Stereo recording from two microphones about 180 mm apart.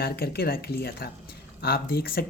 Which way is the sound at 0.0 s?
60° left (ahead or behind).